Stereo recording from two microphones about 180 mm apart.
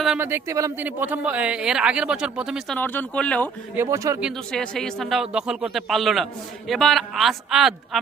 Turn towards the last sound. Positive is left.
turn(degrees=0)  # may be behind; listen again after turning